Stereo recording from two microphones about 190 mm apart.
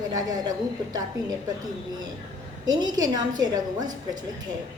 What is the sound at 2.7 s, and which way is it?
A woman's voice, 20° right (ahead or behind).